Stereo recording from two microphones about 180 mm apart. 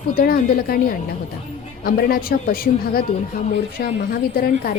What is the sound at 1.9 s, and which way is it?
A woman's voice, 55° left (ahead or behind).